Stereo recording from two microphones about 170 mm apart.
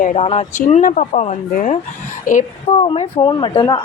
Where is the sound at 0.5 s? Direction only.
45° left (ahead or behind).